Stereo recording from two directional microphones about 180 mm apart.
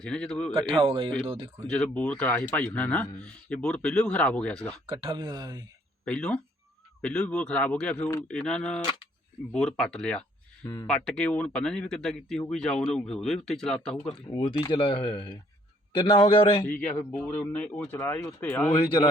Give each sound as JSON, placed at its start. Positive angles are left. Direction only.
{"t": 0.0, "sound": "speech", "side_deg": 5}
{"t": 0.5, "sound": "speech", "side_deg": -30}
{"t": 1.6, "sound": "speech", "side_deg": 5}
{"t": 4.9, "sound": "speech", "side_deg": -30}
{"t": 6.1, "sound": "speech", "side_deg": 5}
{"t": 14.3, "sound": "speech", "side_deg": 25}
{"t": 16.6, "sound": "speech", "side_deg": 10}